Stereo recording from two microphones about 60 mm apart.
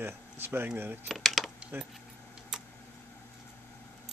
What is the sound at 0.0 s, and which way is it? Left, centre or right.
Speech, right.